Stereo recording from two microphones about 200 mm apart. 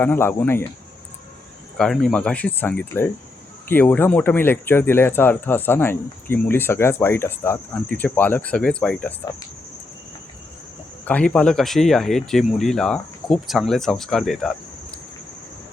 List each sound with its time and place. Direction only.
0.0 s speech: 10° left (ahead or behind)
1.8 s speech: centre (ahead or behind)
11.0 s speech: 5° left (ahead or behind)